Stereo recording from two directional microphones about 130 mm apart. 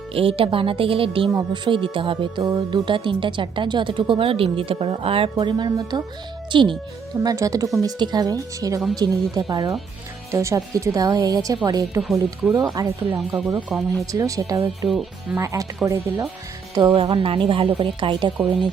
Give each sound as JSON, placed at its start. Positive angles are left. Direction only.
{"t": 0.1, "sound": "a woman's voice", "side_deg": -45}
{"t": 2.4, "sound": "a woman's voice", "side_deg": -30}
{"t": 7.2, "sound": "a woman's voice", "side_deg": -25}
{"t": 12.0, "sound": "speech", "side_deg": 0}
{"t": 12.7, "sound": "a woman's voice", "side_deg": -30}
{"t": 13.1, "sound": "speech", "side_deg": -5}
{"t": 14.1, "sound": "speech", "side_deg": -25}
{"t": 14.8, "sound": "speech", "side_deg": 0}
{"t": 15.4, "sound": "speech", "side_deg": -25}
{"t": 16.9, "sound": "a woman's voice", "side_deg": -45}